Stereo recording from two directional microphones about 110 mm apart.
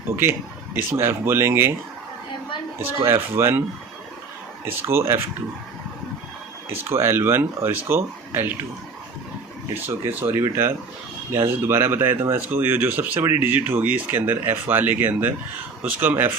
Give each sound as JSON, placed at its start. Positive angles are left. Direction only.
{"t": 0.2, "sound": "speech", "side_deg": -20}
{"t": 2.7, "sound": "speech", "side_deg": -25}
{"t": 4.6, "sound": "speech", "side_deg": -20}
{"t": 6.7, "sound": "speech", "side_deg": -25}
{"t": 9.8, "sound": "speech", "side_deg": -20}